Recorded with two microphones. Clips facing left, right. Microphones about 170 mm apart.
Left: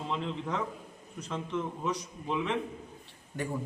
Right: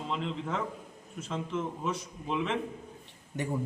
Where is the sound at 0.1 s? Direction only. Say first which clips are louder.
Even; centre (ahead or behind).